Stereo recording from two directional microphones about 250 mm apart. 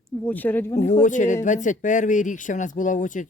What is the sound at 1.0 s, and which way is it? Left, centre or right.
Speech, left.